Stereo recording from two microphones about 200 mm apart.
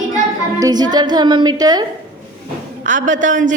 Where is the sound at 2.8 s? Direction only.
40° right (ahead or behind).